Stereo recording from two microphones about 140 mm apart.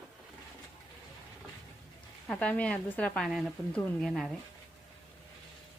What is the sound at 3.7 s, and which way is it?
Speech, 10° left (ahead or behind).